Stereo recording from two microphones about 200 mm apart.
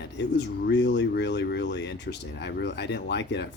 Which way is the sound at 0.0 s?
60° left (ahead or behind).